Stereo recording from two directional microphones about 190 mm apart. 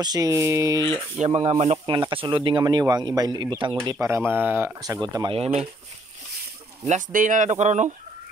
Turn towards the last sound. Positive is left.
turn(degrees=-40)  # may be behind; listen again after turning